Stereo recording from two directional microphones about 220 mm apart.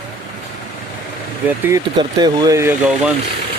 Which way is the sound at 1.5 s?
10° right (ahead or behind).